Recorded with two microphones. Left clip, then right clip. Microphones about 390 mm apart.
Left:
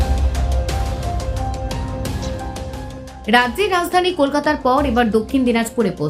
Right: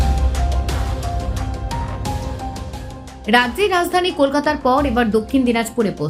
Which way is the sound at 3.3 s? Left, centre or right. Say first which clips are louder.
Even; centre.